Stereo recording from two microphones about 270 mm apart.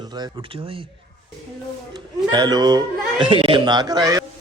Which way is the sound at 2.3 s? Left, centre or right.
Centre.